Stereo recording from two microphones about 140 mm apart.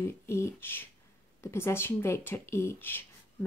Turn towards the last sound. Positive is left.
turn(degrees=15)  # may be behind; listen again after turning